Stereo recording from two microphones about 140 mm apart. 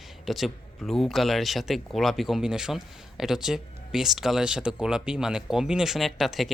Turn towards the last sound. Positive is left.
turn(degrees=0)  # may be behind; listen again after turning